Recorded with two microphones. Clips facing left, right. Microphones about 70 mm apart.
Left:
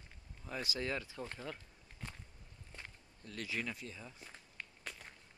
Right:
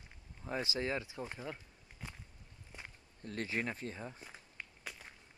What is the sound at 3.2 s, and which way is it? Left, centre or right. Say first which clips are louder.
Speech: right 4 dB; right.